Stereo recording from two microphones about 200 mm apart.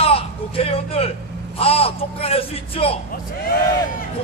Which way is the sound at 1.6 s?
30° left (ahead or behind).